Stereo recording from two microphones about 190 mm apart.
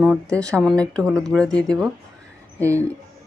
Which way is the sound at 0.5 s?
5° left (ahead or behind).